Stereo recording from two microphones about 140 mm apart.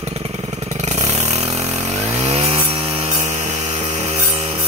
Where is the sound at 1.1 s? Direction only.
50° right (ahead or behind).